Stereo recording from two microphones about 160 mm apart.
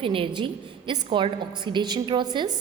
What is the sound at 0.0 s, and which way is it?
A woman's voice, 30° right (ahead or behind).